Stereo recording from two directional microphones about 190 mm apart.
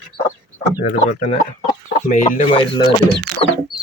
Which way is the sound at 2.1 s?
40° left (ahead or behind).